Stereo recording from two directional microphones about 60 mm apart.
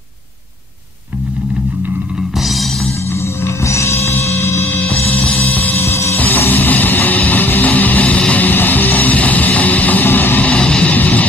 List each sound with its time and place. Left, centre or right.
2.3 s music: centre
3.1 s music: left
4.1 s music: left
10.5 s music: centre